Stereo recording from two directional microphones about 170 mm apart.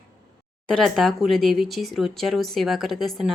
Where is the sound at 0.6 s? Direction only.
Centre (ahead or behind).